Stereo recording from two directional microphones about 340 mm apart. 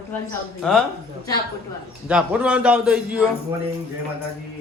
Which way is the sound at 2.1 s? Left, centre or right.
Centre.